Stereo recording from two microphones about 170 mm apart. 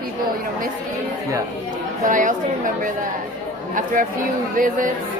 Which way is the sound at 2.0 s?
50° right (ahead or behind).